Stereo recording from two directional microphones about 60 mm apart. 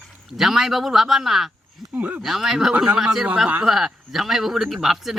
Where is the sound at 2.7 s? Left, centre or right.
Centre.